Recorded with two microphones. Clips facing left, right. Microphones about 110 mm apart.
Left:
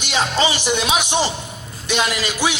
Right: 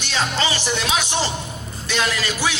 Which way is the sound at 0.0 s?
15° left (ahead or behind).